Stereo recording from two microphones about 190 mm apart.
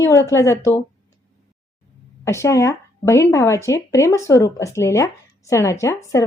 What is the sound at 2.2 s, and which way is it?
A woman's voice, 15° left (ahead or behind).